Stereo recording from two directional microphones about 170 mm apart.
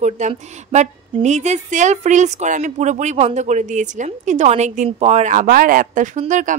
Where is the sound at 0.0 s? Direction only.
40° right (ahead or behind).